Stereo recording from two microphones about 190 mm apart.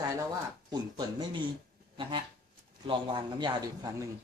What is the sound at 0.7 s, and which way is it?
Speech, 20° right (ahead or behind).